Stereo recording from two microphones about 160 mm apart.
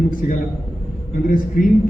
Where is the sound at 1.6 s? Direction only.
55° left (ahead or behind).